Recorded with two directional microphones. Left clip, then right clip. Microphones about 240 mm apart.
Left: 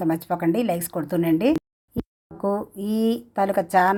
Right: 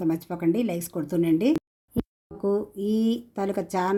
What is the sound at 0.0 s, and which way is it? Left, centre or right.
Speech, centre.